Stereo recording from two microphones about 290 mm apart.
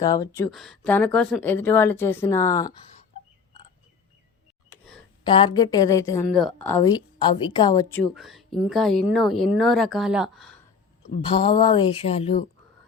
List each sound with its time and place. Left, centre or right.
0.0 s a woman's voice: centre
0.5 s a woman's voice: centre
4.7 s a sound: centre
5.2 s a woman's voice: centre
8.1 s speech: centre
11.2 s speech: centre